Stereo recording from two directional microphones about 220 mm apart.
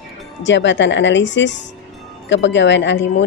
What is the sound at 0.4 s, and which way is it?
A woman's voice, 55° left (ahead or behind).